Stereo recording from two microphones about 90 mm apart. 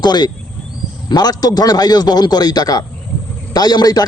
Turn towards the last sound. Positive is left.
turn(degrees=45)  # may be behind; listen again after turning